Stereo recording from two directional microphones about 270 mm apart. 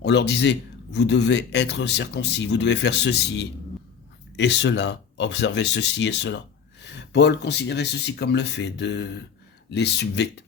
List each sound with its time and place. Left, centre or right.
0.0 s speech: left